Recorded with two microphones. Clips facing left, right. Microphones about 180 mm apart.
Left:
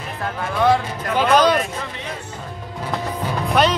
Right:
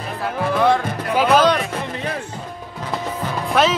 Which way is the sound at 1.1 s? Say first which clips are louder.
Even; 5° right (ahead or behind).